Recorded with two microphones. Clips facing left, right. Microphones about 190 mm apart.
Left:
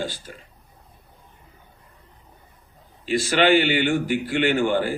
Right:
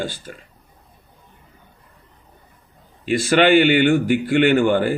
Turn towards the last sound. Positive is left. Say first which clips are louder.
# right 5 dB
turn(degrees=-55)  # may be behind; listen again after turning